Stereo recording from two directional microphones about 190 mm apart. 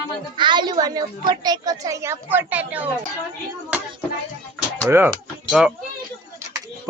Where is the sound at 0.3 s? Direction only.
25° right (ahead or behind); by 2.9 s 10° right (ahead or behind).